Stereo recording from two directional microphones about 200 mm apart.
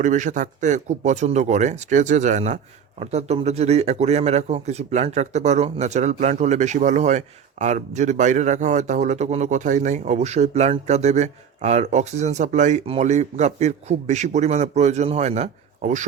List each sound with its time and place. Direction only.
0.0 s a man's voice: 40° right (ahead or behind)